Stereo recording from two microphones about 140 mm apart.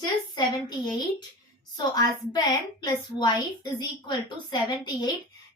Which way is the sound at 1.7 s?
30° left (ahead or behind).